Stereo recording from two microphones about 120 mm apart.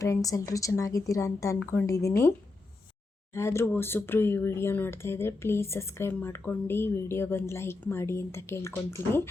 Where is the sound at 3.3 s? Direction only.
25° left (ahead or behind).